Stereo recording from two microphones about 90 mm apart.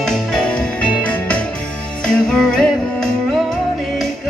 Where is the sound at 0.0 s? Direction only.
5° left (ahead or behind).